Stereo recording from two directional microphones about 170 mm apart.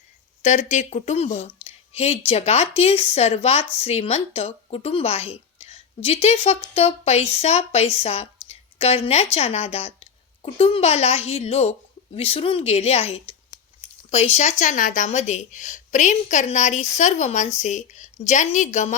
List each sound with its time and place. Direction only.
0.4 s a woman's voice: 45° left (ahead or behind)